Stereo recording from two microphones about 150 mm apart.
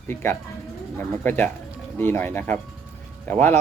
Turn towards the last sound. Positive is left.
turn(degrees=10)  # may be behind; listen again after turning